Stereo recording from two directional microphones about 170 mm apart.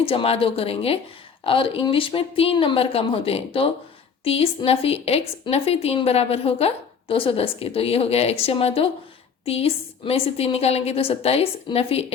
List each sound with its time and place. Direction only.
0.0 s a woman's voice: 35° left (ahead or behind)